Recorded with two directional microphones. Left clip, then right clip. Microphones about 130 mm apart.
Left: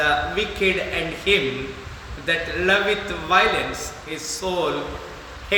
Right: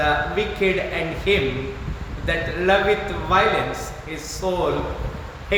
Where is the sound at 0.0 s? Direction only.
15° left (ahead or behind).